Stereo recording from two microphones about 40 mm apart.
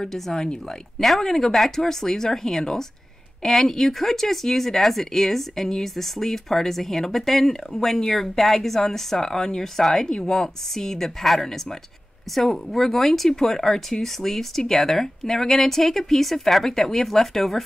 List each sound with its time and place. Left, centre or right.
0.0 s speech: centre
10.0 s speech: left
10.3 s speech: centre